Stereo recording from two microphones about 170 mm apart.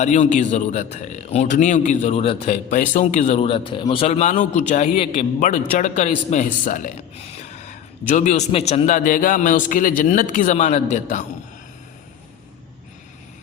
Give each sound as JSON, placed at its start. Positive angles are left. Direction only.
{"t": 0.0, "sound": "a man's voice", "side_deg": 45}